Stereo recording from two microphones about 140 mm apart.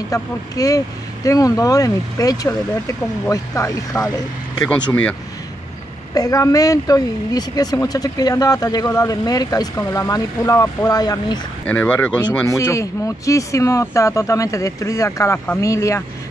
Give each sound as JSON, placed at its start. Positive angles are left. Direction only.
{"t": 0.1, "sound": "speech", "side_deg": 25}
{"t": 4.6, "sound": "speech", "side_deg": 10}
{"t": 6.1, "sound": "speech", "side_deg": 25}
{"t": 11.6, "sound": "speech", "side_deg": 10}
{"t": 12.4, "sound": "speech", "side_deg": 20}